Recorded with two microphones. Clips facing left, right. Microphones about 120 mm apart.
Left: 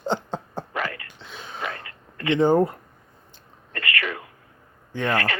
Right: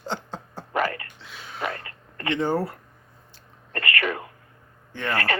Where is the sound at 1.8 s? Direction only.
40° right (ahead or behind).